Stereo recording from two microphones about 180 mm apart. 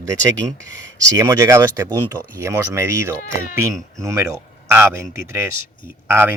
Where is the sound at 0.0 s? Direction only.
20° right (ahead or behind).